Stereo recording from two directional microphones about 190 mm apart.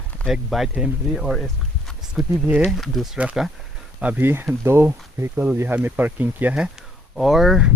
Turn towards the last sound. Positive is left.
turn(degrees=0)  # may be behind; listen again after turning